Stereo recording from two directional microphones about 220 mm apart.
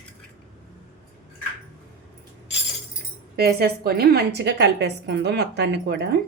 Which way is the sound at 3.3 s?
45° right (ahead or behind).